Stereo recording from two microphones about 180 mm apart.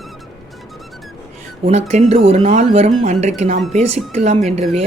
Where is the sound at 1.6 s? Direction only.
35° right (ahead or behind).